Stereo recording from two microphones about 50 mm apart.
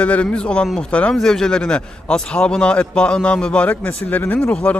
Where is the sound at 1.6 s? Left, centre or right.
Left.